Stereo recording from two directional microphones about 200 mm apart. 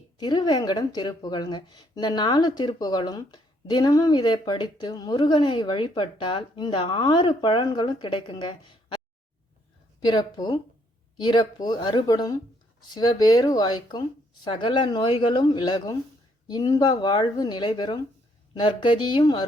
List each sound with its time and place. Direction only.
0.2 s speech: 20° left (ahead or behind)
10.0 s speech: 20° left (ahead or behind)